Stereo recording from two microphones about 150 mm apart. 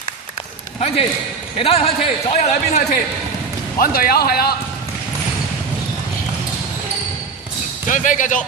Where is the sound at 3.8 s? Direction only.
80° left.